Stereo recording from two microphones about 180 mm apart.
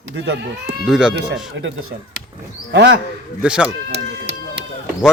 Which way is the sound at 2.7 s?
80° right.